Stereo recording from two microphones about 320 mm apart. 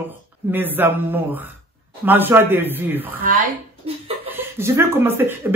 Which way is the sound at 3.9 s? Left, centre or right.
Centre.